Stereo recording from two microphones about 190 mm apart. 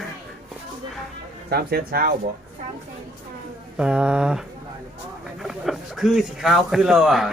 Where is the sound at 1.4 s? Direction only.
55° right (ahead or behind).